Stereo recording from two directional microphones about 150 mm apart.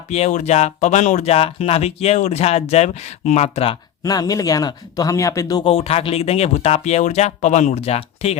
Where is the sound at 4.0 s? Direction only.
25° left (ahead or behind).